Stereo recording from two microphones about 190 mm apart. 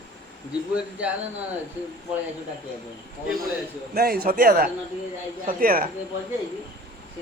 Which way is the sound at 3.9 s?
50° right (ahead or behind).